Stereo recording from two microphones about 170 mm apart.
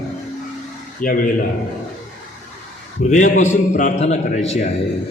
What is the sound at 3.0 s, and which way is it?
A man's voice, 45° left (ahead or behind).